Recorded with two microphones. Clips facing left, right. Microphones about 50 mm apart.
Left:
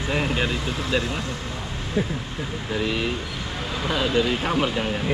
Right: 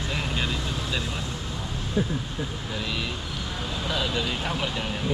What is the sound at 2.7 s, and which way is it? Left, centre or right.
Speech, left.